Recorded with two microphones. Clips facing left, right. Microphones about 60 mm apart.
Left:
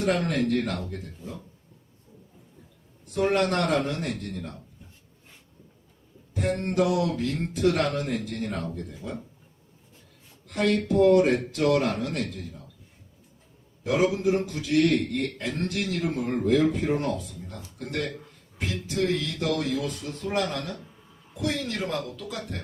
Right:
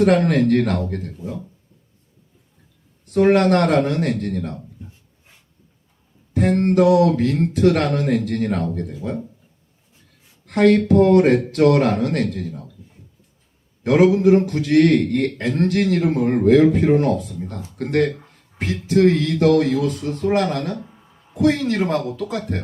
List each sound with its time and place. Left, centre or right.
0.3 s speech: right
3.1 s speech: right
6.3 s speech: right
10.4 s speech: right
13.8 s speech: right
18.6 s speech: right
18.9 s speech: right